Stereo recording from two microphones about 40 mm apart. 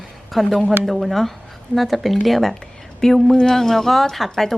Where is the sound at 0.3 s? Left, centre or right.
Centre.